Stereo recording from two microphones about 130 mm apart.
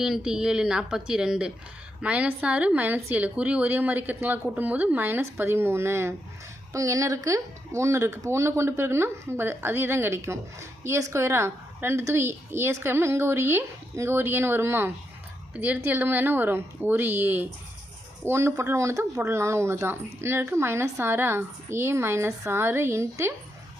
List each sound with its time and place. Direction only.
0.0 s a woman's voice: 5° right (ahead or behind); by 23.3 s 20° right (ahead or behind)